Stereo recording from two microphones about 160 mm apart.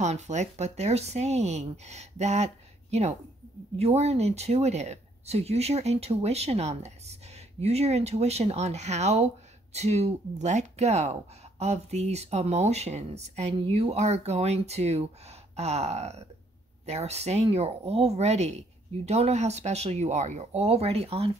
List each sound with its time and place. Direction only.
0.0 s speech: 45° right (ahead or behind)